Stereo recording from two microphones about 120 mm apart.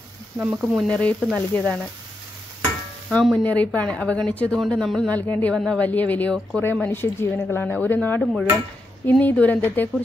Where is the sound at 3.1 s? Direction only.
5° left (ahead or behind).